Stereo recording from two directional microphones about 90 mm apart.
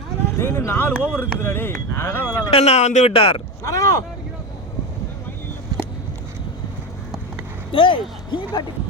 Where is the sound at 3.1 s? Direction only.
90° left.